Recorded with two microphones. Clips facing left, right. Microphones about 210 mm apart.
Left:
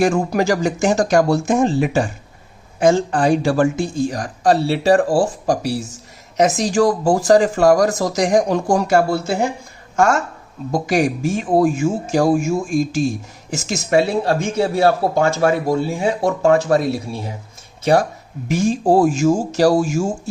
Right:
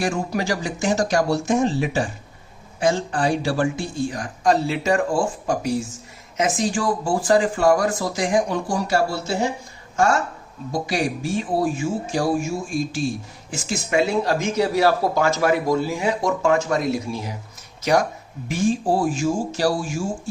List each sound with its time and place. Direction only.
0.0 s speech: 45° left (ahead or behind)
10.7 s a man's voice: 50° left (ahead or behind); by 17.0 s 35° left (ahead or behind)
18.4 s speech: 40° left (ahead or behind)